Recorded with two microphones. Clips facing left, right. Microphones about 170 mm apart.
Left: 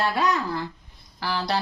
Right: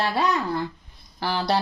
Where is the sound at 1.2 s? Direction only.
30° right (ahead or behind).